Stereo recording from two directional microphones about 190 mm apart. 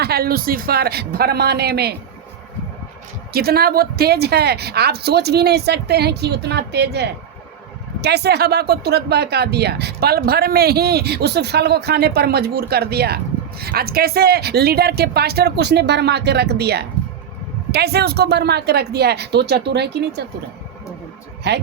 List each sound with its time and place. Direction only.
0.0 s speech: 55° right (ahead or behind)
3.3 s speech: 55° right (ahead or behind)
21.5 s speech: 65° right (ahead or behind)